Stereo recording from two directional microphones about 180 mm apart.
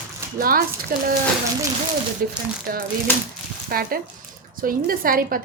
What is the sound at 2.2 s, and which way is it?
A woman's voice, 55° right (ahead or behind).